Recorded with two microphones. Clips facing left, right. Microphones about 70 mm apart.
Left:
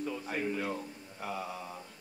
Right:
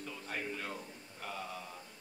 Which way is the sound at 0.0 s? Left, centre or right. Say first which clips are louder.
Left 7 dB; centre.